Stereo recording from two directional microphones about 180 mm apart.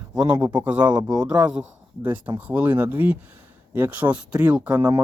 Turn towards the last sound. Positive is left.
turn(degrees=-10)  # may be behind; listen again after turning